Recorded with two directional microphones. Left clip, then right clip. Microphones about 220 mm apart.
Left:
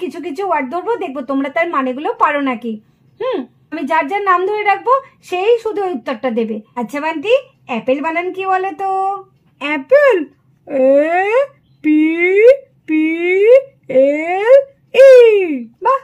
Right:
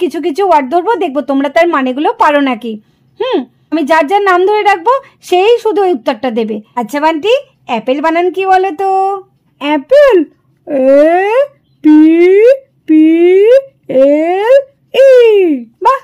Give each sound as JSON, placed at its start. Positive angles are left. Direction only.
{"t": 0.0, "sound": "a woman's voice", "side_deg": -45}
{"t": 9.6, "sound": "a woman's voice", "side_deg": -30}